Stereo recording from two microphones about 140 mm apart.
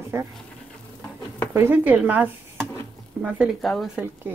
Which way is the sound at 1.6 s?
15° right (ahead or behind).